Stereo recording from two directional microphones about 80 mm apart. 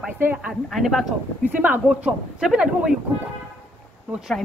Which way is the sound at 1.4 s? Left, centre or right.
Right.